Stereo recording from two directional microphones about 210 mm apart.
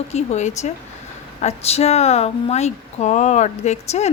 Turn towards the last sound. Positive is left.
turn(degrees=30)  # may be behind; listen again after turning